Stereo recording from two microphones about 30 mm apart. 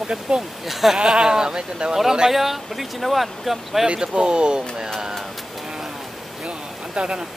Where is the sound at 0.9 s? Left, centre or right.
Right.